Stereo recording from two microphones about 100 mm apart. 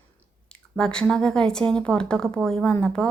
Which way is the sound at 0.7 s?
10° left (ahead or behind).